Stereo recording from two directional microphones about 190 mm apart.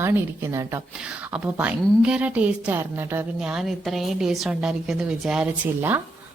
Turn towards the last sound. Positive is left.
turn(degrees=-10)  # may be behind; listen again after turning